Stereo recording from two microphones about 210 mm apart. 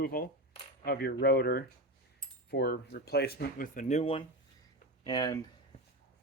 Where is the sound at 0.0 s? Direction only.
45° left (ahead or behind).